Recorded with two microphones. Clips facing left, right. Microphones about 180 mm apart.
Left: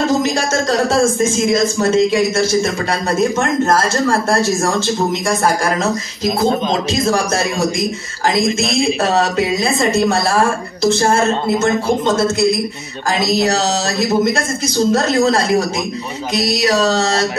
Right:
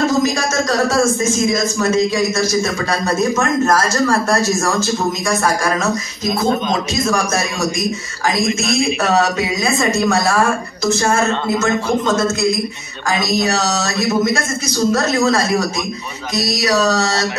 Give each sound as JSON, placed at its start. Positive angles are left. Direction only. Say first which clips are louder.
{"t": 0.7, "sound": "a woman's voice", "louder": "left 1 dB", "side_deg": 30}
{"t": 8.4, "sound": "a woman's voice", "louder": "left 1 dB", "side_deg": 30}